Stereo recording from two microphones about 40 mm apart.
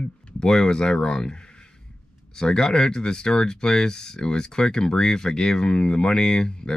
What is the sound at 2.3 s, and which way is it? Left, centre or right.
Speech, centre.